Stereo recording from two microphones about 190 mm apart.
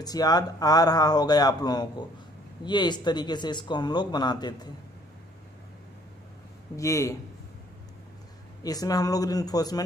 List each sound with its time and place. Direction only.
0.0 s speech: 20° left (ahead or behind)
6.8 s speech: 15° left (ahead or behind)
8.6 s speech: 20° left (ahead or behind)